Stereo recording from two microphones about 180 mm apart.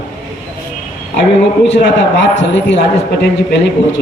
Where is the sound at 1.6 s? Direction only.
80° left.